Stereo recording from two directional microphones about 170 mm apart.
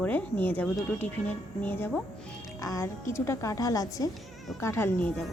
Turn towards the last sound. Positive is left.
turn(degrees=10)  # may be behind; listen again after turning